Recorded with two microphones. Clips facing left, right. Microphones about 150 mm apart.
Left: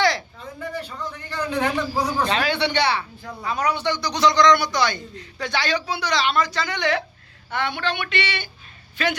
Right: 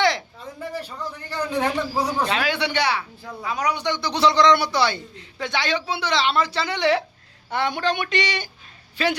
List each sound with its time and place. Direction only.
0.8 s a sound: 10° right (ahead or behind)
1.2 s speech: 30° right (ahead or behind)
1.7 s a man's voice: 10° right (ahead or behind); by 9.1 s 30° right (ahead or behind)